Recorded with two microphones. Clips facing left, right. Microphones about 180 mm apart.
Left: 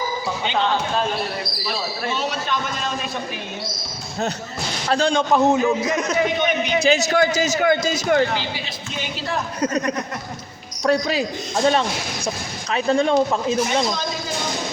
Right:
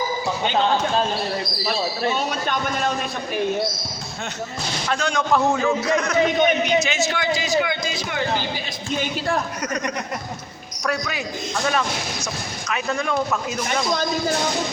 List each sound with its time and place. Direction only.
2.1 s a man's voice: 50° right (ahead or behind)
4.9 s speech: 30° left (ahead or behind)
6.7 s a man's voice: 35° left (ahead or behind)
9.0 s a man's voice: 50° right (ahead or behind)
9.6 s speech: 25° left (ahead or behind)
10.8 s speech: 30° left (ahead or behind)